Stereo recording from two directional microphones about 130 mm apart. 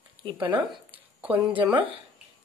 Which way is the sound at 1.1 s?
10° right (ahead or behind).